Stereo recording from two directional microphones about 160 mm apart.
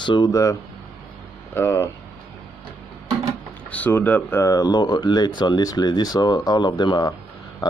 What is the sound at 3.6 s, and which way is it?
Speech, 10° left (ahead or behind).